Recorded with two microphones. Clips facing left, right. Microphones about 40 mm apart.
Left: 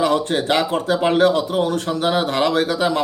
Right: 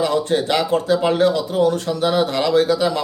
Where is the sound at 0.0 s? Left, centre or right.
Left.